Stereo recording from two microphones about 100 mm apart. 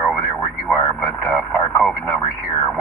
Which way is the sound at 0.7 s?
15° left (ahead or behind).